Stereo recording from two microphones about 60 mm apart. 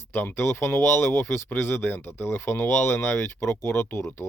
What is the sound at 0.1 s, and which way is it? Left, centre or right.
Speech, left.